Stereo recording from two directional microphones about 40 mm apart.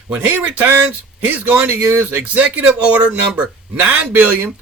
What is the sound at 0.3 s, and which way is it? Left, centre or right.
Speech, right.